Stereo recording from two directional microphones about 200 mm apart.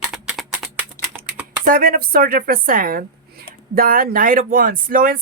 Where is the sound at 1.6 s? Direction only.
45° right (ahead or behind).